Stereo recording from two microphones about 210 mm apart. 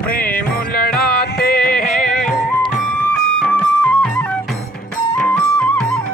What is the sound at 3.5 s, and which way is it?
Music, 10° left (ahead or behind).